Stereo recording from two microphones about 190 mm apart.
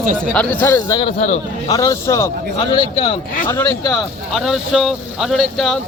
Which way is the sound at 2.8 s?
30° left (ahead or behind).